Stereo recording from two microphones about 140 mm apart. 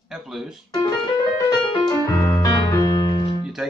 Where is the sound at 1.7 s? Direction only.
25° left (ahead or behind).